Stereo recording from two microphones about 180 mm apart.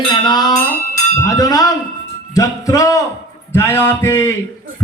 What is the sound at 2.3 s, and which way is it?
Speech, 20° left (ahead or behind).